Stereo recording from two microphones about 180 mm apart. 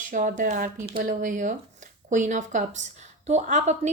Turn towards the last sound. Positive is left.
turn(degrees=-40)  # may be behind; listen again after turning